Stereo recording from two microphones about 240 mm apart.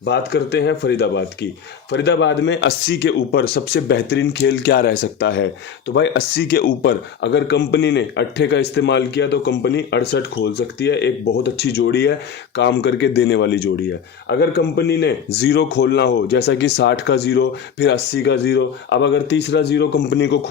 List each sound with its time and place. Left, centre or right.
0.0 s speech: left